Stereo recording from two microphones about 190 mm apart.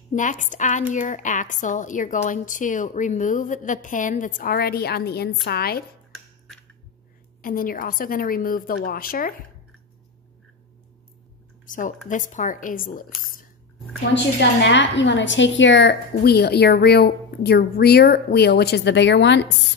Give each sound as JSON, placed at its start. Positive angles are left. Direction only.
{"t": 0.1, "sound": "a woman's voice", "side_deg": 40}
{"t": 7.4, "sound": "a woman's voice", "side_deg": 45}
{"t": 11.6, "sound": "a sound", "side_deg": 45}
{"t": 12.1, "sound": "a woman's voice", "side_deg": 40}
{"t": 14.7, "sound": "a woman's voice", "side_deg": 70}